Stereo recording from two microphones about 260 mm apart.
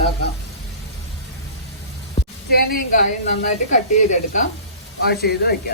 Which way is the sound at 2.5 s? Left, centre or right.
Left.